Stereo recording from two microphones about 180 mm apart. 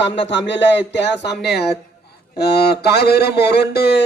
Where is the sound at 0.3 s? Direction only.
90° left.